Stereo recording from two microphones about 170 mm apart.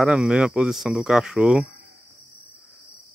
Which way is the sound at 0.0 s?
5° right (ahead or behind).